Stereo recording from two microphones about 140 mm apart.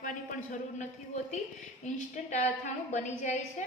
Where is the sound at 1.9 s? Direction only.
60° left (ahead or behind).